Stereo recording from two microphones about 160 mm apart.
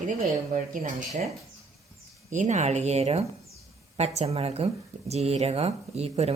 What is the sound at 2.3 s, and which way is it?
Speech, 50° right (ahead or behind).